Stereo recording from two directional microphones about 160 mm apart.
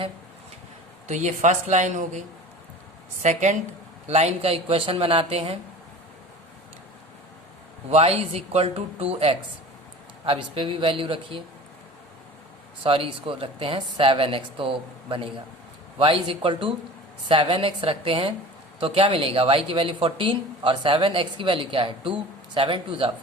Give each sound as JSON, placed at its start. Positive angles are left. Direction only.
{"t": 1.0, "sound": "a woman's voice", "side_deg": -50}
{"t": 3.2, "sound": "a woman's voice", "side_deg": -50}
{"t": 7.9, "sound": "speech", "side_deg": -40}
{"t": 12.8, "sound": "speech", "side_deg": -35}